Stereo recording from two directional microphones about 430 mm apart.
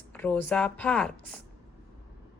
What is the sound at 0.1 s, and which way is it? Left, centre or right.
Speech, centre.